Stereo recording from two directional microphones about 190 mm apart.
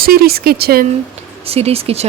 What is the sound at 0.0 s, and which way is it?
Speech, 55° right (ahead or behind).